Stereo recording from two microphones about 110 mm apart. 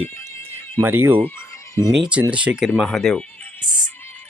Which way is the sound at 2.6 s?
Centre (ahead or behind).